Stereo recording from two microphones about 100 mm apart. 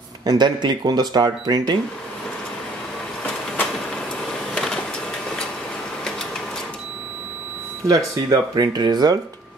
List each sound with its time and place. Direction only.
0.2 s speech: 45° right (ahead or behind)
7.8 s speech: 35° right (ahead or behind)